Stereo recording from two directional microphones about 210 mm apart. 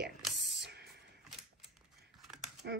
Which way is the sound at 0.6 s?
50° right (ahead or behind).